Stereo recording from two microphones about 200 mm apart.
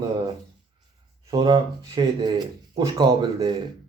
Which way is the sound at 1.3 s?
25° right (ahead or behind).